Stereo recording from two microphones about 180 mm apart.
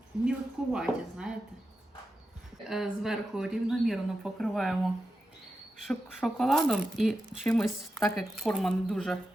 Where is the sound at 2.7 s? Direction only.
Centre (ahead or behind).